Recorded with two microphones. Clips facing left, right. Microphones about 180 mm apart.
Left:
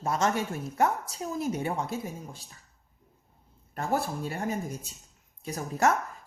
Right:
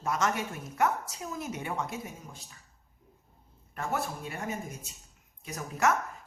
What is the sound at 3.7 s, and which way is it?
A woman's voice, 35° left (ahead or behind).